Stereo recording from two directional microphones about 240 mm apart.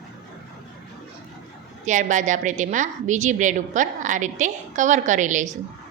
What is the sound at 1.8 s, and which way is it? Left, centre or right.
A woman's voice, right.